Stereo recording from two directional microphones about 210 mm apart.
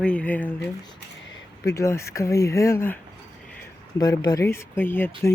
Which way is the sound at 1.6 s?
15° left (ahead or behind).